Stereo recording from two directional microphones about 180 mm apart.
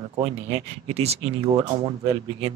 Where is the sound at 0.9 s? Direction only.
35° right (ahead or behind).